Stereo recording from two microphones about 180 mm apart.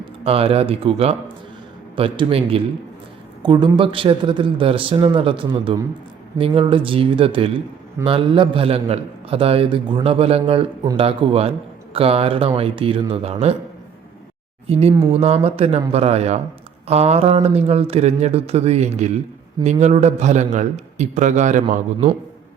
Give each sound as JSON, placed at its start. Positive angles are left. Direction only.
{"t": 0.3, "sound": "a man's voice", "side_deg": -35}
{"t": 14.7, "sound": "a man's voice", "side_deg": -35}